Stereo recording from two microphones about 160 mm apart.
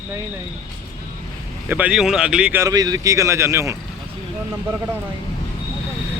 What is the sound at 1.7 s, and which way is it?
Speech, 5° right (ahead or behind).